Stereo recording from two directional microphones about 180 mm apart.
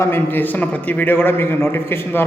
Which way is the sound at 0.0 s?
10° left (ahead or behind).